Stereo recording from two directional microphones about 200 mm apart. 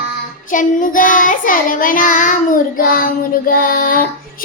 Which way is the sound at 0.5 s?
40° left (ahead or behind).